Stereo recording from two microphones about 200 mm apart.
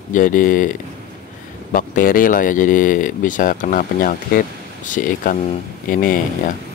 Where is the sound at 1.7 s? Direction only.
45° left (ahead or behind).